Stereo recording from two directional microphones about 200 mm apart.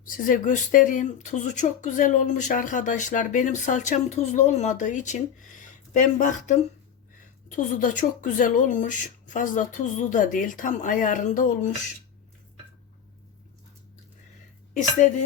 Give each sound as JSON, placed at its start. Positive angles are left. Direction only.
{"t": 0.3, "sound": "speech", "side_deg": 40}
{"t": 14.7, "sound": "a woman's voice", "side_deg": 40}